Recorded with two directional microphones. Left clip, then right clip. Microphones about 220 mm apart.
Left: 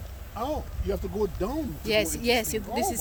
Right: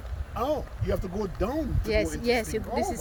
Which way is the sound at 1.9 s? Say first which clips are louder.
Left 2 dB; 15° left (ahead or behind).